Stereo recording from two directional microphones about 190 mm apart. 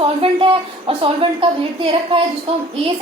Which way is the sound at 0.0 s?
30° right (ahead or behind).